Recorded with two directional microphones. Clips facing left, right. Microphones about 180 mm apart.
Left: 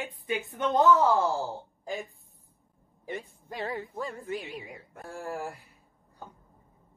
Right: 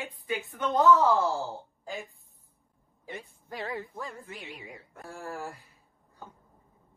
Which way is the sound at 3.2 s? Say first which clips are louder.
Left 2 dB; 35° left (ahead or behind).